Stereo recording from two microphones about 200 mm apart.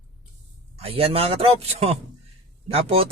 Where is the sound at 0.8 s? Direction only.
30° right (ahead or behind).